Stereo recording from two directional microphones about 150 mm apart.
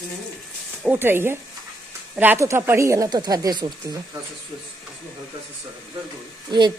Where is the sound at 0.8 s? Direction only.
15° right (ahead or behind); by 4.0 s 30° right (ahead or behind).